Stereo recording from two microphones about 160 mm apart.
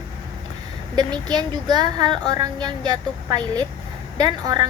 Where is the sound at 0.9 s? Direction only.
25° right (ahead or behind).